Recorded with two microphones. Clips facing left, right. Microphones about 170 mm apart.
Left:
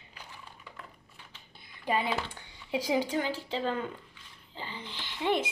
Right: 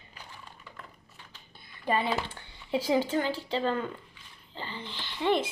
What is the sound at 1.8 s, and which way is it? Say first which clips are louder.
A woman's voice: right 2 dB; 15° left (ahead or behind).